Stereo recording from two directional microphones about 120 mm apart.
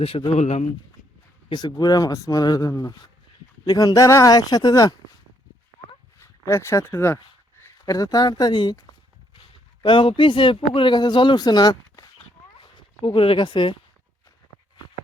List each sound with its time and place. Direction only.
0.0 s speech: 55° left (ahead or behind)
1.5 s speech: 40° left (ahead or behind)
6.1 s speech: 25° left (ahead or behind)
9.8 s speech: 45° left (ahead or behind)
12.5 s a sound: 45° left (ahead or behind)